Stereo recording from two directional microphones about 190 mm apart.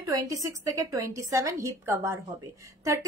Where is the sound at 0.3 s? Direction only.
15° right (ahead or behind).